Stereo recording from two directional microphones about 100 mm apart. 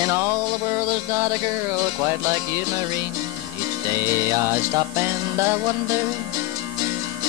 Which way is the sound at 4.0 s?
25° right (ahead or behind).